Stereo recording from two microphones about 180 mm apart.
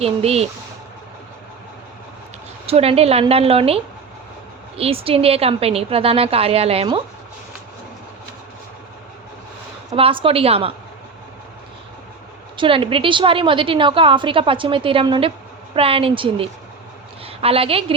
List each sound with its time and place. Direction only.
0.0 s a woman's voice: 35° right (ahead or behind)
2.6 s a woman's voice: 35° right (ahead or behind)
4.8 s a woman's voice: 30° right (ahead or behind)
9.9 s a woman's voice: 30° right (ahead or behind)
12.5 s a woman's voice: 30° right (ahead or behind)